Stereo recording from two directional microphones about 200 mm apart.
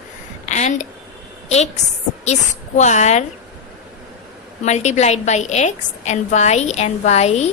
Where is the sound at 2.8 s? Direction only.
35° left (ahead or behind).